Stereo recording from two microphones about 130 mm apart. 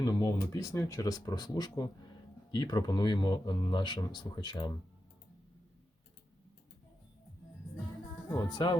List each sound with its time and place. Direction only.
0.0 s speech: 25° left (ahead or behind)
8.4 s speech: 35° left (ahead or behind)